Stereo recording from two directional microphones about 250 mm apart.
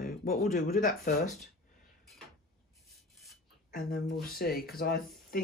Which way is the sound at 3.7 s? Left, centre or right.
Left.